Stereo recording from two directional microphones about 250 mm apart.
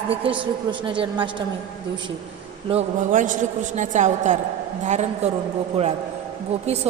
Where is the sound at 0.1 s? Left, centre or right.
Right.